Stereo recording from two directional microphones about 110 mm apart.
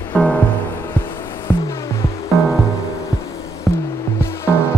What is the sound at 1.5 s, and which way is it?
Music, 15° left (ahead or behind).